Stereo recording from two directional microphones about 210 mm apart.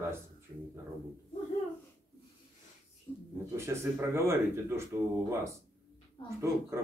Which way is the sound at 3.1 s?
25° left (ahead or behind).